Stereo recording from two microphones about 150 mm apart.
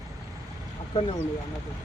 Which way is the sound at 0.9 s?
35° left (ahead or behind).